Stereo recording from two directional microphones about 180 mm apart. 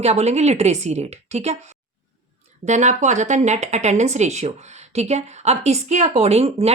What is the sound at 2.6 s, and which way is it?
Speech, 40° right (ahead or behind).